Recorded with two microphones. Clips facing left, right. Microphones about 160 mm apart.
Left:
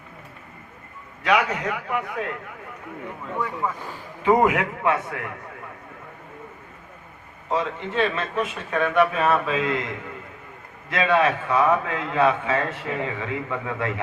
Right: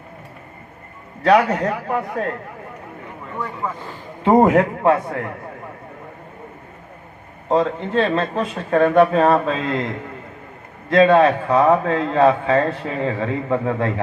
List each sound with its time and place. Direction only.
1.2 s a man's voice: 40° right (ahead or behind)
3.4 s speech: 10° left (ahead or behind)
4.2 s a man's voice: 35° right (ahead or behind)
7.4 s a man's voice: 35° right (ahead or behind)